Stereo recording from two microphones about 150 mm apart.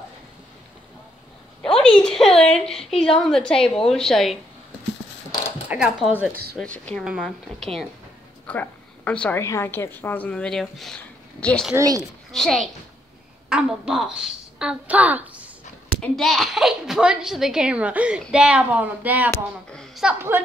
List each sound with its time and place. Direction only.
1.6 s a sound: 5° left (ahead or behind)
2.4 s a child's voice: 5° left (ahead or behind)
5.7 s a child's voice: 5° right (ahead or behind)
6.6 s a woman's voice: 5° left (ahead or behind)
11.7 s speech: 25° right (ahead or behind)
12.3 s a child's voice: centre (ahead or behind)
16.0 s a child's voice: centre (ahead or behind)
19.3 s a child's voice: 5° left (ahead or behind)
20.1 s speech: 15° right (ahead or behind)